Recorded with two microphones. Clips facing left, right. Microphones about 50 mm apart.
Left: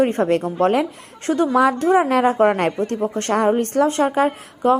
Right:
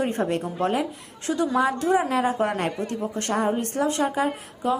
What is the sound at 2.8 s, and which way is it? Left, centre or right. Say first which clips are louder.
A woman's voice: left 6 dB; left.